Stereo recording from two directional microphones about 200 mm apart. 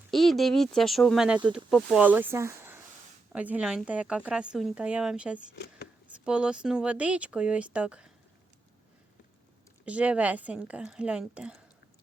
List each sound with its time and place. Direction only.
0.1 s speech: centre (ahead or behind)
5.5 s a sound: 55° left (ahead or behind)
6.1 s speech: 5° right (ahead or behind)
9.8 s speech: 5° right (ahead or behind)